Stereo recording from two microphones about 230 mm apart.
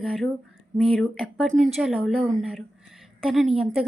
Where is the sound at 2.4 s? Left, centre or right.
Centre.